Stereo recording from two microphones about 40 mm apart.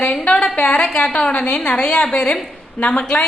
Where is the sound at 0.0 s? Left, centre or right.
Left.